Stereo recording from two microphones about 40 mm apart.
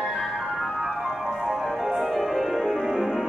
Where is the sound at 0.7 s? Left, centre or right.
Right.